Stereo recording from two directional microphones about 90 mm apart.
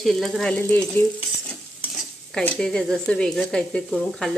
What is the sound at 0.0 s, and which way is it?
Speech, centre (ahead or behind).